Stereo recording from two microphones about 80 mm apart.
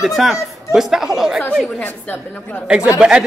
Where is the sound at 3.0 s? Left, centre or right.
Centre.